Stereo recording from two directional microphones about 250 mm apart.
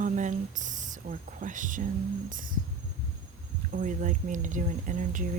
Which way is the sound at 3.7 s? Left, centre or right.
Right.